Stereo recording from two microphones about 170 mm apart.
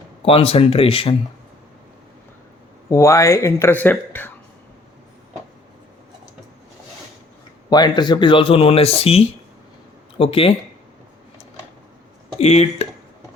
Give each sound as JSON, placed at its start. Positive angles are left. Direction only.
{"t": 0.3, "sound": "speech", "side_deg": 35}
{"t": 2.9, "sound": "speech", "side_deg": 15}
{"t": 7.7, "sound": "speech", "side_deg": 25}
{"t": 12.4, "sound": "speech", "side_deg": 40}